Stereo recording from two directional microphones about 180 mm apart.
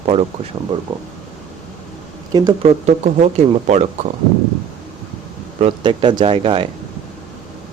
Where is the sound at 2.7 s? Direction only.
40° right (ahead or behind).